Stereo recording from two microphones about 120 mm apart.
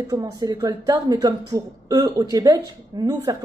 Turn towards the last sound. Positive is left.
turn(degrees=-35)  # may be behind; listen again after turning